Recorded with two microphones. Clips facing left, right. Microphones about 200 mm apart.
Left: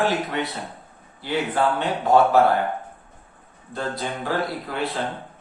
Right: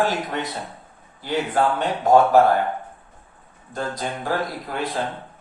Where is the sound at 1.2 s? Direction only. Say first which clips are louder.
Right 1 dB; 45° right (ahead or behind).